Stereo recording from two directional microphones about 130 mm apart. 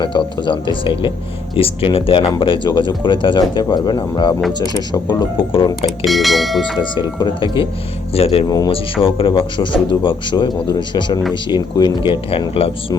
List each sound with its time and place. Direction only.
0.3 s speech: 35° left (ahead or behind)
6.1 s speech: centre (ahead or behind)
6.7 s speech: 35° left (ahead or behind)
8.4 s speech: 30° left (ahead or behind)
8.7 s speech: 45° left (ahead or behind)